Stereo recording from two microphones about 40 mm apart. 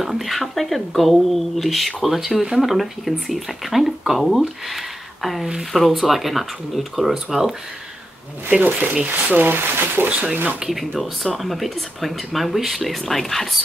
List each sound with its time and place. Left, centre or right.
0.0 s speech: centre
8.5 s speech: right
9.3 s speech: right
10.3 s speech: right
10.6 s speech: centre